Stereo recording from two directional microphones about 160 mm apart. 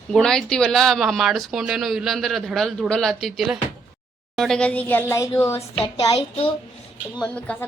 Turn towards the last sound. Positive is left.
turn(degrees=10)  # may be behind; listen again after turning